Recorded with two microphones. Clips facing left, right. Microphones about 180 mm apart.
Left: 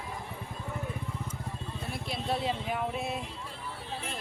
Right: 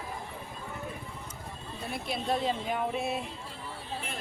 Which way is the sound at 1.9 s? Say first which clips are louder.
Right 2 dB; centre (ahead or behind).